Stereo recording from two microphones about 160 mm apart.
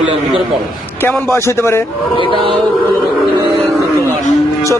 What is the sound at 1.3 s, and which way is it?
Speech, 15° left (ahead or behind).